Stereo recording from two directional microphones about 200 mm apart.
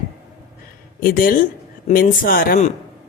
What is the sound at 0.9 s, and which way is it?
Speech, 45° left (ahead or behind).